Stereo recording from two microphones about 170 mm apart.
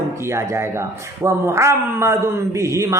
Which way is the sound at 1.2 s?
15° right (ahead or behind).